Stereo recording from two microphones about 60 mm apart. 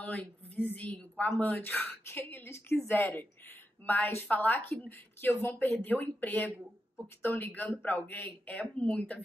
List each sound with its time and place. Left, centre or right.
0.0 s speech: left
2.4 s a woman's voice: left